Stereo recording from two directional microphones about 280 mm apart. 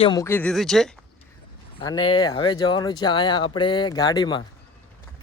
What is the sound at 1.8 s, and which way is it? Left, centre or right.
Speech, centre.